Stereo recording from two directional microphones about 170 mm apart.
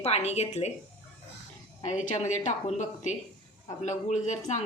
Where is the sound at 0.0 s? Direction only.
40° left (ahead or behind).